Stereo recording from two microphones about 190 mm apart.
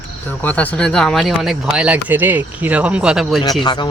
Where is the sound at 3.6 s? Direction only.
25° left (ahead or behind).